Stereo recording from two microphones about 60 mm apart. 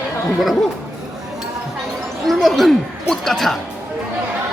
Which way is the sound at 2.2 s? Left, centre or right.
Centre.